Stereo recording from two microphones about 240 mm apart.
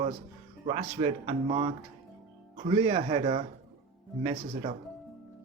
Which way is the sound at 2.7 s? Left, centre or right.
Right.